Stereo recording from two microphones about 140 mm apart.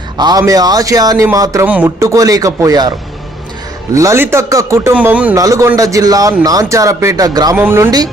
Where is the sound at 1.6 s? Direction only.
10° right (ahead or behind); by 2.9 s 25° right (ahead or behind).